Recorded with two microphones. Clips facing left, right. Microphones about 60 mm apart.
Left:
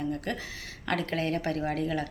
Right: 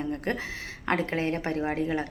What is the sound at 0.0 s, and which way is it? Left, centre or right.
Speech, right.